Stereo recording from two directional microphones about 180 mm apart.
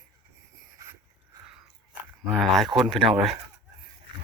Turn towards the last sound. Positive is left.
turn(degrees=0)  # may be behind; listen again after turning